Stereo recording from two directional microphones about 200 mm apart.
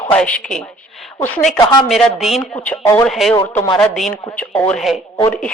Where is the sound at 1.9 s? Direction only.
Centre (ahead or behind).